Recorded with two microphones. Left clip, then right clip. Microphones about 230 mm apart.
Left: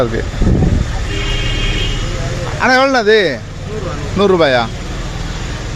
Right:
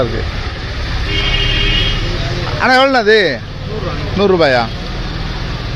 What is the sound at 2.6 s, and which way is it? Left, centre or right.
A man's voice, centre.